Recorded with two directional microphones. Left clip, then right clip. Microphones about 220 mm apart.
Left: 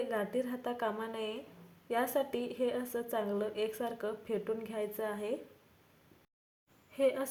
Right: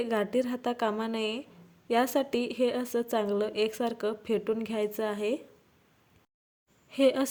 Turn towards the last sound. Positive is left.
turn(degrees=-45)  # may be behind; listen again after turning